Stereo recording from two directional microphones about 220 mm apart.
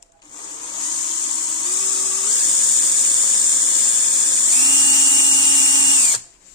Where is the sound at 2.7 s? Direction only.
20° left (ahead or behind).